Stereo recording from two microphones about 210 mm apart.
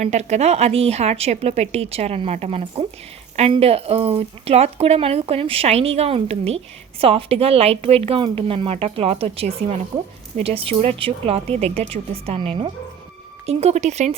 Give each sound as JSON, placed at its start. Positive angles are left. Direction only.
{"t": 0.0, "sound": "speech", "side_deg": -30}